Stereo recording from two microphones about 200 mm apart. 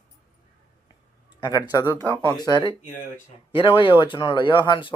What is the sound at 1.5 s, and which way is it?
Speech, 15° left (ahead or behind).